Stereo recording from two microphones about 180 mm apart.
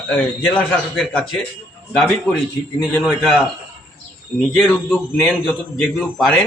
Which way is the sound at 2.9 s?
Centre (ahead or behind).